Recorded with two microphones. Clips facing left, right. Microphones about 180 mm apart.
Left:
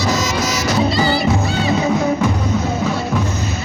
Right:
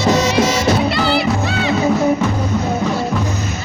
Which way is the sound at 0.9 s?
65° right (ahead or behind).